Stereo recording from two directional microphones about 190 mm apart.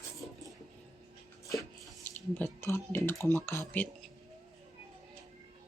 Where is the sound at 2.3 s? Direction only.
10° left (ahead or behind).